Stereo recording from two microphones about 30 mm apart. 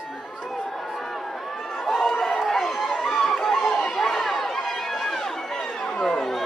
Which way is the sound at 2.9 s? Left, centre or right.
Centre.